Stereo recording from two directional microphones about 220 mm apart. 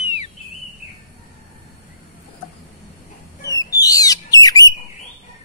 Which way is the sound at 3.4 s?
15° left (ahead or behind).